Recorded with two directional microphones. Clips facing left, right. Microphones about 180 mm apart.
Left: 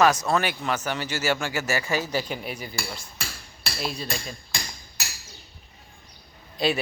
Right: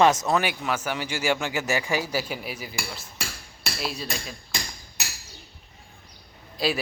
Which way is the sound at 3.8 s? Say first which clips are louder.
Left 1 dB; 5° right (ahead or behind).